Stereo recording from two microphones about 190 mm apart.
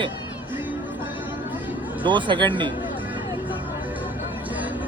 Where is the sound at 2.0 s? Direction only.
25° right (ahead or behind).